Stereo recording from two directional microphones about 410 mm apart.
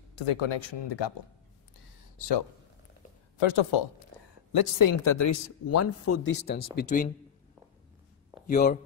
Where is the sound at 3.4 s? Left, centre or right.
Left.